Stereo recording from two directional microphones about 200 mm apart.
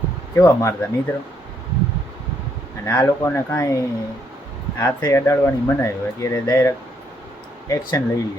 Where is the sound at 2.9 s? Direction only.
10° left (ahead or behind).